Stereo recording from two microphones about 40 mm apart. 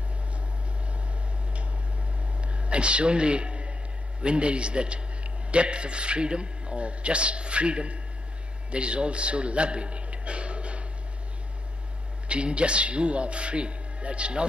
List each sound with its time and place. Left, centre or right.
2.4 s a sound: right
4.2 s a man's voice: right
12.3 s a man's voice: right